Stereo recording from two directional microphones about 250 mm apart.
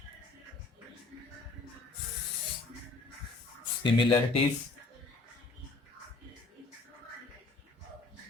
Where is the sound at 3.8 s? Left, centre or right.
Centre.